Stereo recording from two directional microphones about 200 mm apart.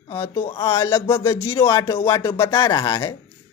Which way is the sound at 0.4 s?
25° left (ahead or behind).